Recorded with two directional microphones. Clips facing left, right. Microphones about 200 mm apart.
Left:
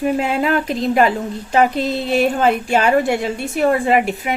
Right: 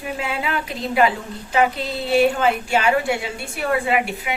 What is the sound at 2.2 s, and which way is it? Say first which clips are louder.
A woman's voice: left 1 dB; 45° left (ahead or behind).